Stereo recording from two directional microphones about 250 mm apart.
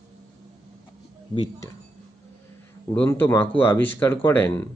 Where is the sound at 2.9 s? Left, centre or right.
Centre.